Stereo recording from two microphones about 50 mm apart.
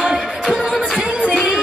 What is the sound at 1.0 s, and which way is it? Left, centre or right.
Music, centre.